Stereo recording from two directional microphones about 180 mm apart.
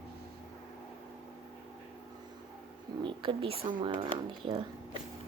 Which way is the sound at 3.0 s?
25° right (ahead or behind).